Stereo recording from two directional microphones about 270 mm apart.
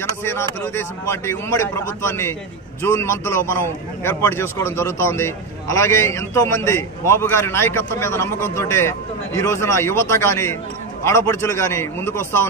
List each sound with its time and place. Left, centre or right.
0.2 s a man's voice: centre